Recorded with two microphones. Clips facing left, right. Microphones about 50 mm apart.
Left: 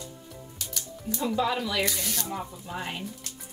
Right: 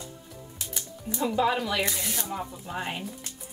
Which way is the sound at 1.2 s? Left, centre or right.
Centre.